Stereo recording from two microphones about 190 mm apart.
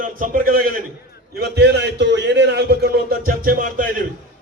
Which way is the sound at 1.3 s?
60° right (ahead or behind).